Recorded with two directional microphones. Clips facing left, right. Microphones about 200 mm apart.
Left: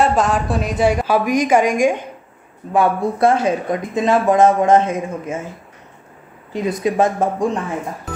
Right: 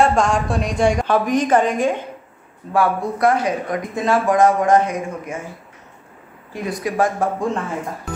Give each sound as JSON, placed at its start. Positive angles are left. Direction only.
{"t": 0.0, "sound": "a woman's voice", "side_deg": 5}
{"t": 2.7, "sound": "speech", "side_deg": 25}
{"t": 6.5, "sound": "speech", "side_deg": 20}